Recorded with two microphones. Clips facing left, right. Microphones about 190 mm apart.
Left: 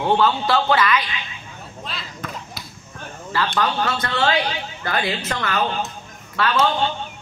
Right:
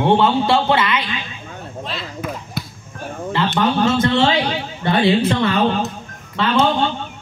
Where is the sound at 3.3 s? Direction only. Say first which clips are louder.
Right 4 dB; 25° right (ahead or behind).